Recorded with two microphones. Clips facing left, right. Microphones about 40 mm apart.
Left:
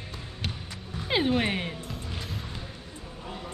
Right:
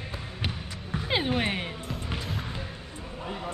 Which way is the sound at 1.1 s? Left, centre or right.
Centre.